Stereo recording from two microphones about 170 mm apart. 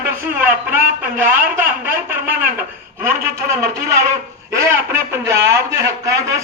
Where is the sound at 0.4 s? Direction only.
10° right (ahead or behind).